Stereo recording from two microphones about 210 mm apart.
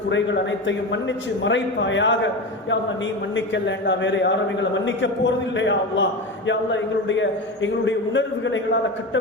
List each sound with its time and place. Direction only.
0.7 s a man's voice: 60° left (ahead or behind)